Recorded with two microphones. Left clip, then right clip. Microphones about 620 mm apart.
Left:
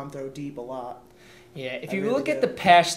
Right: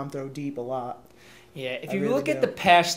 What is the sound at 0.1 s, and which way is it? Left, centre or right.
Speech, right.